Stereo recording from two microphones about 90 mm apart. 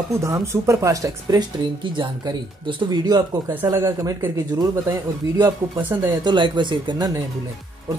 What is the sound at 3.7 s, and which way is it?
Speech, 35° right (ahead or behind).